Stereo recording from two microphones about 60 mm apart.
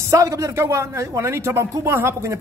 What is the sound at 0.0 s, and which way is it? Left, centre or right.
A man's voice, right.